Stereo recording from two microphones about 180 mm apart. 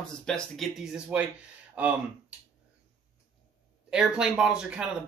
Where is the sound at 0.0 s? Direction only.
5° left (ahead or behind).